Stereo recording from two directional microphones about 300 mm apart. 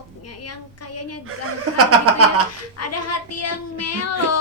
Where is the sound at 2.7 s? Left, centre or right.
Left.